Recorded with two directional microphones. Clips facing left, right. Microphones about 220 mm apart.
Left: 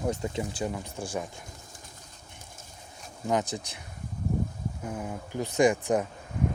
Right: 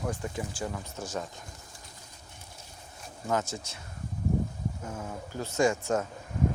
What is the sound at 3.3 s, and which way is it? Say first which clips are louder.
Speech: left 2 dB; 15° left (ahead or behind).